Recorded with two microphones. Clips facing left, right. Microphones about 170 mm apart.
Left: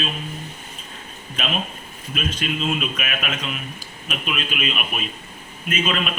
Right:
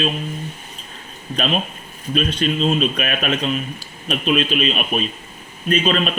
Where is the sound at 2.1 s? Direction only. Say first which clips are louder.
Right 6 dB; 35° right (ahead or behind).